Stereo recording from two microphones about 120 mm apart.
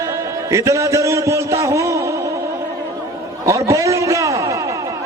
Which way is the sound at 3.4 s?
25° right (ahead or behind).